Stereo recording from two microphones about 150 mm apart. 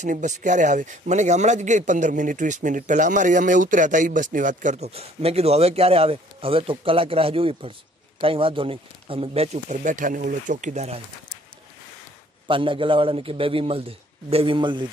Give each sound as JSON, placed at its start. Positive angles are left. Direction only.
{"t": 0.0, "sound": "speech", "side_deg": -55}
{"t": 12.4, "sound": "a man's voice", "side_deg": -35}